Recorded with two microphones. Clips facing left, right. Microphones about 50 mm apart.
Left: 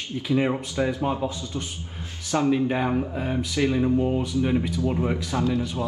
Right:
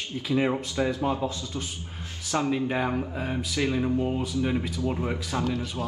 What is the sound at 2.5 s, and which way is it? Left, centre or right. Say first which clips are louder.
Speech: left 3 dB; centre.